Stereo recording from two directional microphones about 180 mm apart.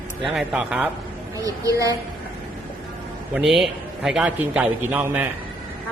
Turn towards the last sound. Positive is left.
turn(degrees=-10)  # may be behind; listen again after turning